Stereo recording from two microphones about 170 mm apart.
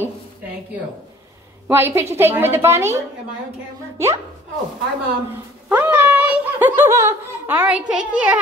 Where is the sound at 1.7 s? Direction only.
15° right (ahead or behind).